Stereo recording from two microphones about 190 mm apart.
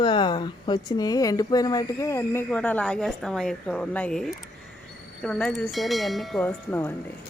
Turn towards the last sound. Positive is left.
turn(degrees=10)  # may be behind; listen again after turning